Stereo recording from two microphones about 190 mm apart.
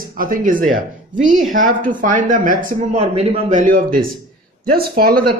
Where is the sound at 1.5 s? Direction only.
45° right (ahead or behind).